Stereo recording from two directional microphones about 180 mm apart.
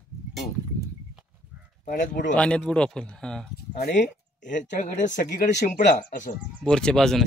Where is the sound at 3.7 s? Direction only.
55° left (ahead or behind).